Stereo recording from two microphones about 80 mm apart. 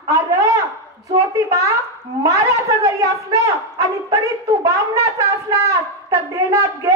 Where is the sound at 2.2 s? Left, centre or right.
Right.